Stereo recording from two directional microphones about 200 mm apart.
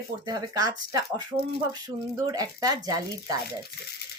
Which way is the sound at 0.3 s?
20° right (ahead or behind).